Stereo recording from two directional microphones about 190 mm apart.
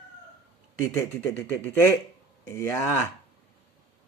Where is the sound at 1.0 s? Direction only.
10° left (ahead or behind).